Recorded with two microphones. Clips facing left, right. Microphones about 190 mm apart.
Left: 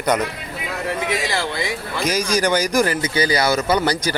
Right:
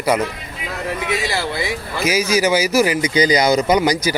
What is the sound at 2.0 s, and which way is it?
Speech, 5° right (ahead or behind).